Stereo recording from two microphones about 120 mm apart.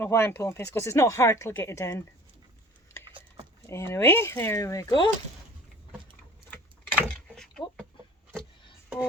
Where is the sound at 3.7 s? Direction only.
20° left (ahead or behind).